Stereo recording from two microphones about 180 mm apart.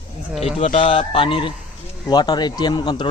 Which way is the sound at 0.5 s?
30° left (ahead or behind).